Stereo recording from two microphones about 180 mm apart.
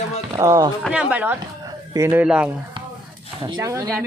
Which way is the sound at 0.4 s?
15° right (ahead or behind).